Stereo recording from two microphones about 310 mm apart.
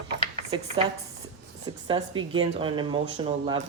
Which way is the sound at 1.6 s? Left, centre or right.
Centre.